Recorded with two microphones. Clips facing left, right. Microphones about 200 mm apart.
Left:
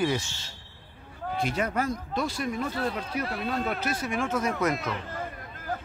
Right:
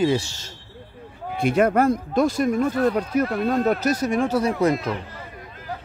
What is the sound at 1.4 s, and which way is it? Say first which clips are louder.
Speech: right 11 dB; 55° right (ahead or behind).